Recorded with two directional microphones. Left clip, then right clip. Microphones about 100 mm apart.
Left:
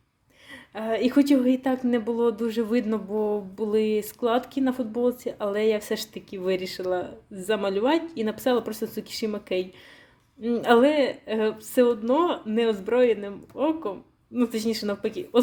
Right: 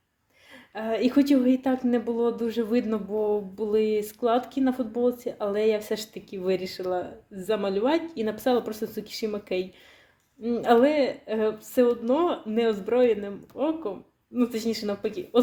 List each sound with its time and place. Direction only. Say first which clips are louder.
0.7 s a woman's voice: left 1 dB; 40° left (ahead or behind)
10.4 s a woman's voice: left 1 dB; 55° left (ahead or behind)